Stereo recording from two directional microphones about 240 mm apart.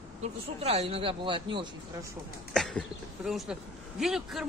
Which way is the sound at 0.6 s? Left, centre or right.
Right.